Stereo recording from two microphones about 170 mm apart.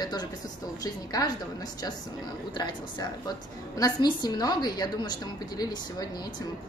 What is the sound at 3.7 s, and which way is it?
Speech, 25° left (ahead or behind).